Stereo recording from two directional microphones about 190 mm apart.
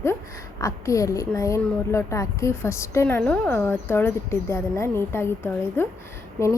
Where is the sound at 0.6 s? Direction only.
15° left (ahead or behind).